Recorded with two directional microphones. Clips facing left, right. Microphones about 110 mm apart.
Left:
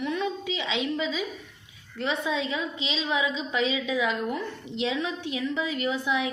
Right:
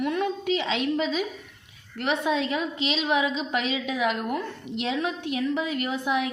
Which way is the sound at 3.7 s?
55° right (ahead or behind).